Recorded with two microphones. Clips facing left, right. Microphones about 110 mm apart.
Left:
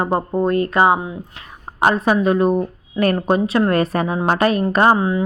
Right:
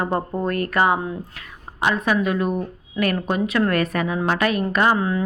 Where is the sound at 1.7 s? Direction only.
40° left (ahead or behind).